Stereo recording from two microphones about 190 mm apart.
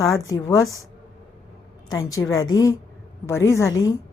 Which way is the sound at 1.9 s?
20° left (ahead or behind).